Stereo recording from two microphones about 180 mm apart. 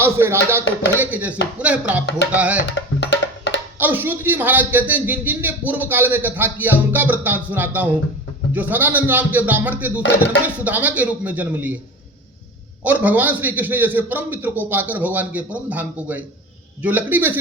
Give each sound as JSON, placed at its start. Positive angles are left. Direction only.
{"t": 0.0, "sound": "a man's voice", "side_deg": -15}
{"t": 2.6, "sound": "music", "side_deg": 75}
{"t": 3.8, "sound": "a man's voice", "side_deg": -10}
{"t": 12.8, "sound": "a man's voice", "side_deg": -10}